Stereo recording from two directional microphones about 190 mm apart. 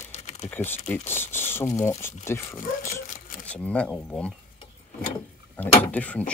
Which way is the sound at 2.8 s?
45° left (ahead or behind).